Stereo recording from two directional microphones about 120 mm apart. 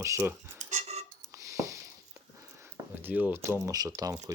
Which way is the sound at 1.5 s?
25° right (ahead or behind).